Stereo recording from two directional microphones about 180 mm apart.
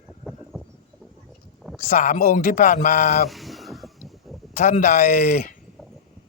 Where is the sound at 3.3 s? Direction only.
Centre (ahead or behind).